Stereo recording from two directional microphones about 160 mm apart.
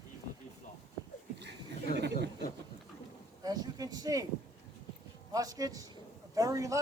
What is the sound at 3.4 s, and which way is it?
Speech, 25° right (ahead or behind).